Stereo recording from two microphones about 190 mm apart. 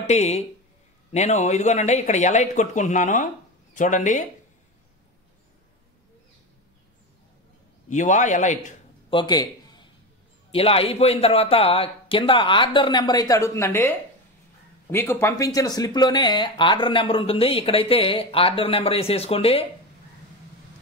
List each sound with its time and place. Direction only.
0.0 s speech: 35° left (ahead or behind)
7.9 s speech: 40° left (ahead or behind)
9.1 s a man's voice: 20° left (ahead or behind)